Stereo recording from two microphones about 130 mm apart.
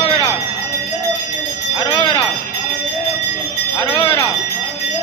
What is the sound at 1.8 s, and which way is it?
Bell, 40° left (ahead or behind).